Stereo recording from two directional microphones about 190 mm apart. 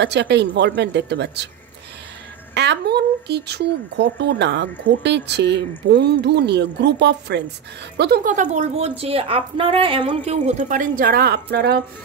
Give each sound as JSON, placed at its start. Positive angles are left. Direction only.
{"t": 0.0, "sound": "speech", "side_deg": -65}
{"t": 2.5, "sound": "a woman's voice", "side_deg": -65}